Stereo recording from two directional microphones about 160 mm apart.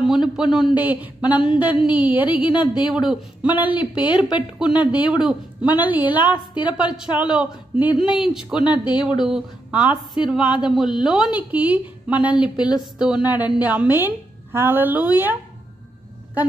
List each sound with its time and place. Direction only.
0.0 s a woman's voice: 5° right (ahead or behind)